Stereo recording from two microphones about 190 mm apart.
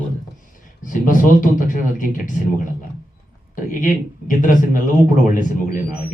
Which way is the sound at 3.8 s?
45° left (ahead or behind).